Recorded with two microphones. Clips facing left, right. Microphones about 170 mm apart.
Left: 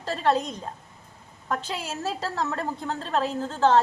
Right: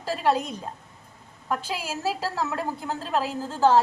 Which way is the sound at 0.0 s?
10° right (ahead or behind).